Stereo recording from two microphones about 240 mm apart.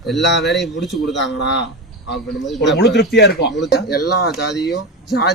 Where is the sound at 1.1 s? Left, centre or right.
Left.